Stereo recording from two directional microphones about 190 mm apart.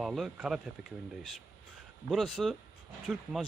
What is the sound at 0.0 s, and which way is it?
Speech, centre (ahead or behind).